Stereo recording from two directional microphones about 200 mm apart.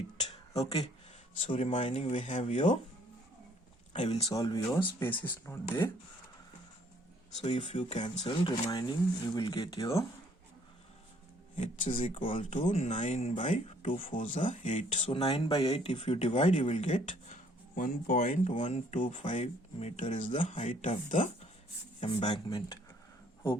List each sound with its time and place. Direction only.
1.4 s speech: 35° left (ahead or behind)
4.0 s speech: 30° left (ahead or behind)
4.4 s speech: 15° left (ahead or behind)
7.4 s speech: 30° left (ahead or behind)
11.5 s speech: 40° left (ahead or behind); by 22.8 s 25° left (ahead or behind)